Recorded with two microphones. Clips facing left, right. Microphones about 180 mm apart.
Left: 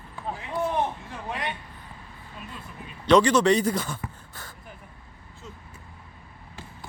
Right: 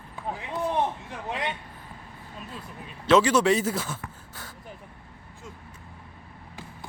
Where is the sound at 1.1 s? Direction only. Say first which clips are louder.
Right 1 dB; 20° right (ahead or behind).